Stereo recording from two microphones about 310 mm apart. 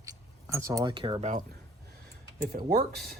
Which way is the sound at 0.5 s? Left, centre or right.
Centre.